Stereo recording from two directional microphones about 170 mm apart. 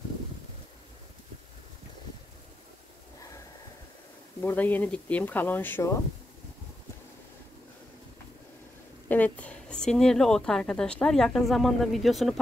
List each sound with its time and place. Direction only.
4.4 s speech: 10° left (ahead or behind)
9.1 s a woman's voice: 10° left (ahead or behind)